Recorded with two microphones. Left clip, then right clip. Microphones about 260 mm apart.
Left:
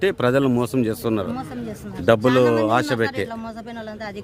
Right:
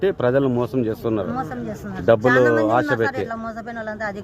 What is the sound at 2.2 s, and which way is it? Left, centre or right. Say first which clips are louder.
A woman's voice: right 1 dB; centre.